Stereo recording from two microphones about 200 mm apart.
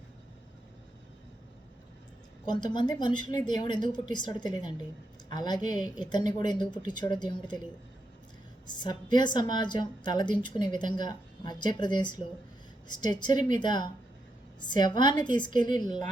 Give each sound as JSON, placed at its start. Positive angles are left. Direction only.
{"t": 2.5, "sound": "a woman's voice", "side_deg": 20}
{"t": 8.6, "sound": "a woman's voice", "side_deg": 20}